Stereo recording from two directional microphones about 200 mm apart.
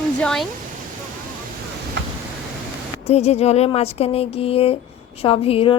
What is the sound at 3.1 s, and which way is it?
A woman's voice, 30° left (ahead or behind).